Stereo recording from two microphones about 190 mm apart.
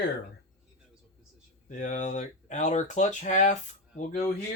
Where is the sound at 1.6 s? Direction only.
40° left (ahead or behind).